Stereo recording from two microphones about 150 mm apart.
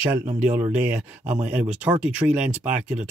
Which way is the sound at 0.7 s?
10° right (ahead or behind).